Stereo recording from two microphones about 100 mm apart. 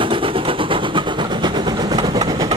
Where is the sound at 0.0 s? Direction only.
60° right (ahead or behind).